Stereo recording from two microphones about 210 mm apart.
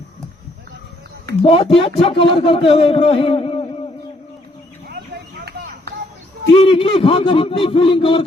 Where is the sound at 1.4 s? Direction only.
25° left (ahead or behind).